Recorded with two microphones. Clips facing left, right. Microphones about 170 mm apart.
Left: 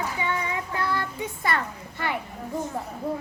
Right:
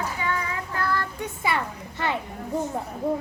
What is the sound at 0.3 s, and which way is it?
Child singing, 20° left (ahead or behind).